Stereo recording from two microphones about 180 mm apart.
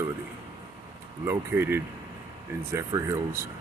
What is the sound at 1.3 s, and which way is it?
Speech, 15° right (ahead or behind).